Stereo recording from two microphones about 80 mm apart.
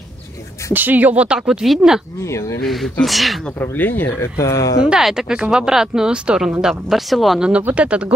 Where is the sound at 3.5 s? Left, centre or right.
Left.